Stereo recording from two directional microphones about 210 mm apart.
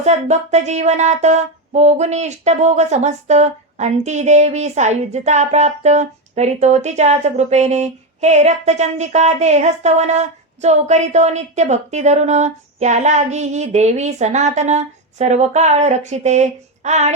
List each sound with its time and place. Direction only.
0.0 s speech: 30° right (ahead or behind)